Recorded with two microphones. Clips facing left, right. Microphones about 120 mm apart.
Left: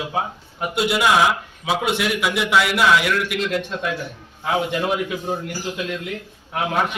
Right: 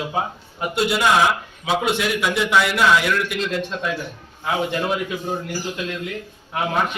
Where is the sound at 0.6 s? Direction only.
5° left (ahead or behind).